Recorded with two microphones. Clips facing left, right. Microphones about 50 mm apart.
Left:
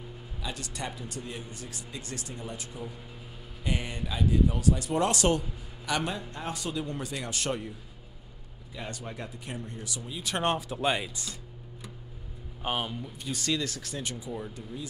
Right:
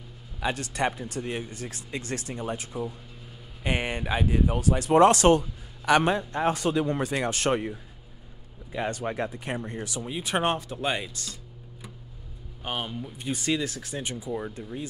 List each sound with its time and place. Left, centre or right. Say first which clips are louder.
0.4 s speech: right 10 dB; right
8.7 s speech: right 10 dB; right
10.4 s speech: right 1 dB; centre
12.6 s speech: even; centre
13.2 s speech: right 3 dB; right
13.9 s speech: right 5 dB; right